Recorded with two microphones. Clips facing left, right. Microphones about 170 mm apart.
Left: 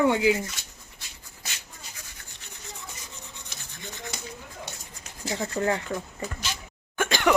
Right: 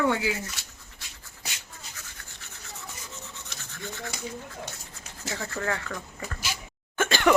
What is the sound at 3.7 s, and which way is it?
Rub, 15° left (ahead or behind).